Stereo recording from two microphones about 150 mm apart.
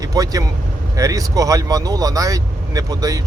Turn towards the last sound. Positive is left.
turn(degrees=-25)  # may be behind; listen again after turning